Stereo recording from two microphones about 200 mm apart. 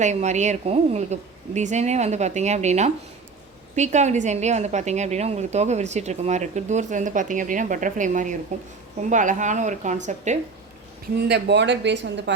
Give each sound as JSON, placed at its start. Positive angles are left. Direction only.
{"t": 0.0, "sound": "a woman's voice", "side_deg": -35}
{"t": 11.3, "sound": "speech", "side_deg": -60}